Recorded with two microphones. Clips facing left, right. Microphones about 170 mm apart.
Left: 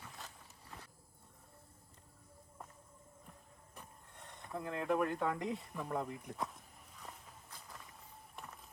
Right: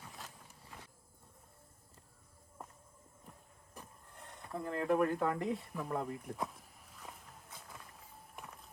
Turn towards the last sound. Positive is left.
turn(degrees=0)  # may be behind; listen again after turning